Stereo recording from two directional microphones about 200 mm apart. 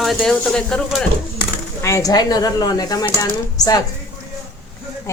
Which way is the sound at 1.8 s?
15° left (ahead or behind).